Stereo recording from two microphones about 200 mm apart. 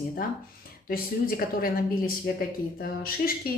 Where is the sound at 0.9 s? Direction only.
45° left (ahead or behind).